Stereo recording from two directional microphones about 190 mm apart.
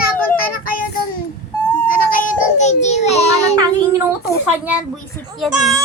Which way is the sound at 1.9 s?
45° left (ahead or behind).